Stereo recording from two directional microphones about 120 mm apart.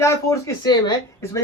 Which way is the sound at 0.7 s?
35° left (ahead or behind).